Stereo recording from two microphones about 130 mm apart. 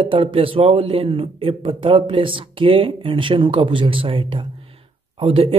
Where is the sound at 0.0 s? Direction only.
40° right (ahead or behind).